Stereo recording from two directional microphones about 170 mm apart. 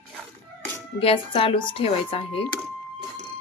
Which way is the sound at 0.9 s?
30° left (ahead or behind).